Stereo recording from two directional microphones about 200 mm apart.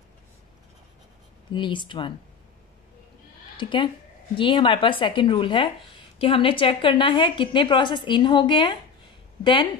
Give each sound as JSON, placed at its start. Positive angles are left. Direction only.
{"t": 1.5, "sound": "a woman's voice", "side_deg": 25}
{"t": 3.5, "sound": "a woman's voice", "side_deg": 25}